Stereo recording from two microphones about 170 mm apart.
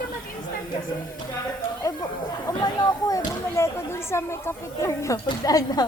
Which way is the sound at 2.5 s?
20° left (ahead or behind).